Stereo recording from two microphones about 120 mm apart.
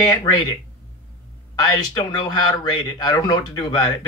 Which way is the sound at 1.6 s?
35° left (ahead or behind).